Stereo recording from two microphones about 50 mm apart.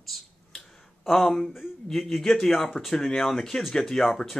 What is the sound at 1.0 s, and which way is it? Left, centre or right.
Speech, centre.